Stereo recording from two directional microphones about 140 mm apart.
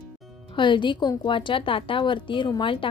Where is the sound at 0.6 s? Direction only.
35° left (ahead or behind).